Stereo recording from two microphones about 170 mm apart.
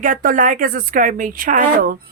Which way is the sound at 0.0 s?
50° right (ahead or behind).